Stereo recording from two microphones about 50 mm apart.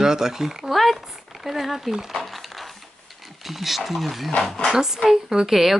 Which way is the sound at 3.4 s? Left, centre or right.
Centre.